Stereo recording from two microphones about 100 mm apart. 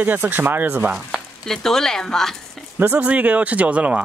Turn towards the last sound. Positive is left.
turn(degrees=-15)  # may be behind; listen again after turning